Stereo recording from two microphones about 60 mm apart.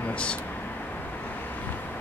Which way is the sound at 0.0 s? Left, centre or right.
Centre.